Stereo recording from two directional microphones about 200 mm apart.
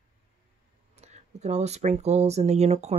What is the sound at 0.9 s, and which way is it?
Speech, 35° right (ahead or behind).